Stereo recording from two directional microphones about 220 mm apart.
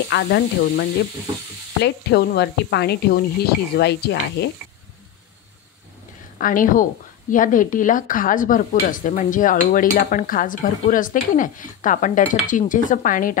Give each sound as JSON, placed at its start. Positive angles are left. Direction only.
{"t": 0.1, "sound": "speech", "side_deg": 50}
{"t": 6.3, "sound": "a woman's voice", "side_deg": 40}